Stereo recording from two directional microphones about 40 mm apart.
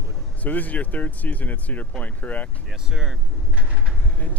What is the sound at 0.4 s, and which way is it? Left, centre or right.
Speech, left.